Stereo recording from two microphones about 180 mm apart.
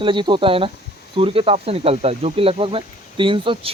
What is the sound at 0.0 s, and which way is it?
Speech, 25° right (ahead or behind).